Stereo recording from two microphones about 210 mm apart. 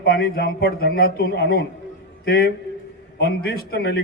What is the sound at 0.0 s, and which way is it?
A man's voice, 50° left (ahead or behind).